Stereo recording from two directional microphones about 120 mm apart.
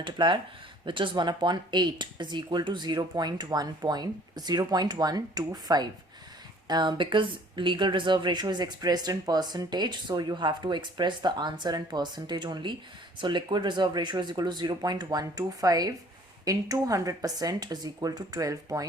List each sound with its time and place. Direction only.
0.0 s speech: 40° right (ahead or behind)